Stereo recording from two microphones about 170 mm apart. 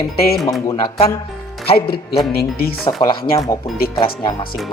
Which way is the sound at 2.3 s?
65° left (ahead or behind).